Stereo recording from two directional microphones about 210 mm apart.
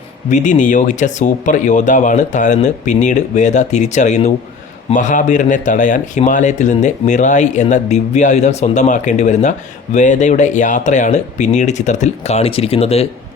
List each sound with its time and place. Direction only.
0.3 s speech: 35° left (ahead or behind)